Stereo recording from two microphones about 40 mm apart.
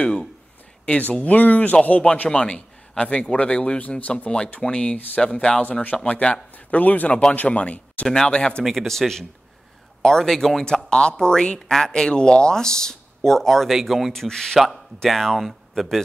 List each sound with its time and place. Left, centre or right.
0.8 s speech: left
5.6 s speech: left
7.1 s speech: left
7.3 s speech: left
8.3 s speech: left
8.6 s speech: centre
10.9 s speech: left; by 13.7 s centre
13.7 s speech: centre
14.1 s speech: centre